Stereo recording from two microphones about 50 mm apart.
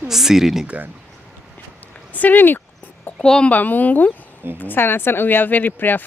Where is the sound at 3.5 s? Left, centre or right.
Left.